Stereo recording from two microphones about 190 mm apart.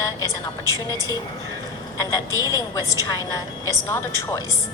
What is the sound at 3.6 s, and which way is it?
Speech, 20° left (ahead or behind).